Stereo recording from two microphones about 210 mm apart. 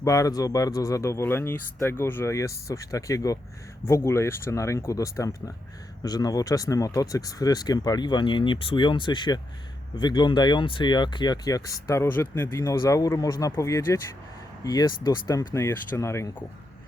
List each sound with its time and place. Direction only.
0.0 s speech: 15° left (ahead or behind)